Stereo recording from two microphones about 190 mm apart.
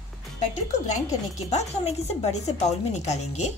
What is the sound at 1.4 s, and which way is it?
Speech, 35° left (ahead or behind).